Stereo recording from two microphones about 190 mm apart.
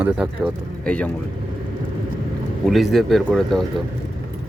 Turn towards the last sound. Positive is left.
turn(degrees=0)  # may be behind; listen again after turning